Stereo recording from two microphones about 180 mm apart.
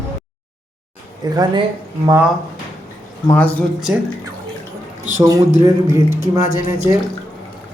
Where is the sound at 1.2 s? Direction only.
20° right (ahead or behind).